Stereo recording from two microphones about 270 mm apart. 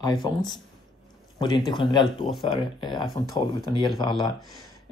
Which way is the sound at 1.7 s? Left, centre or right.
Centre.